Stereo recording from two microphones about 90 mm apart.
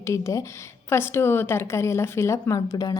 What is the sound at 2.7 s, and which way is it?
Speech, 50° left (ahead or behind).